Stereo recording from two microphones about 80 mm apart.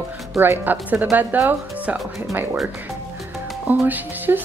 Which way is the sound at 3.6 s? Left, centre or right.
Right.